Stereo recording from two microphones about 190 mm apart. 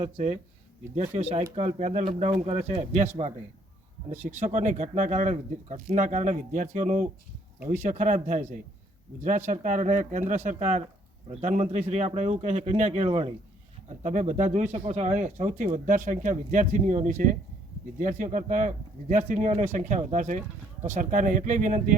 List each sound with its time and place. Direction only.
0.0 s speech: 35° right (ahead or behind)